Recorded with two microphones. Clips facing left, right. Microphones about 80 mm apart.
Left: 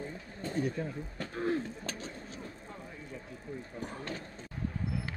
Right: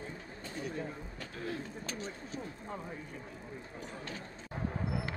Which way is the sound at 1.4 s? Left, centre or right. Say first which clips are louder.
Left 7 dB; left.